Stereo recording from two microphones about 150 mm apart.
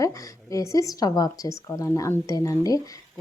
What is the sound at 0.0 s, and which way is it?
A woman's voice, 20° left (ahead or behind).